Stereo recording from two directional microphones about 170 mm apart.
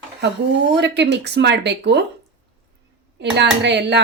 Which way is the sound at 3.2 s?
90° right.